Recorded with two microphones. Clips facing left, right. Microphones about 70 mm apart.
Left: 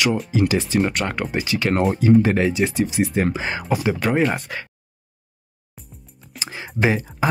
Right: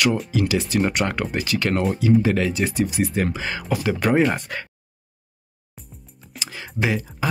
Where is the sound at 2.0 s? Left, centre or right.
Left.